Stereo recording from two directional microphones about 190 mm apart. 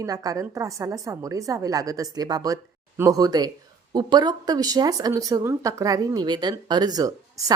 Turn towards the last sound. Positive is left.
turn(degrees=-20)  # may be behind; listen again after turning